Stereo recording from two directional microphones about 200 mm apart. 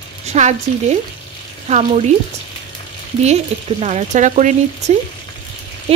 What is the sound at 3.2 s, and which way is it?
A woman's voice, 35° right (ahead or behind).